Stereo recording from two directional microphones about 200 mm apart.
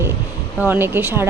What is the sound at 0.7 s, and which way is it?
Speech, 10° right (ahead or behind).